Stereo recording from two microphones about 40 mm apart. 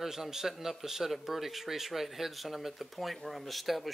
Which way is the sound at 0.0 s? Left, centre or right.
Centre.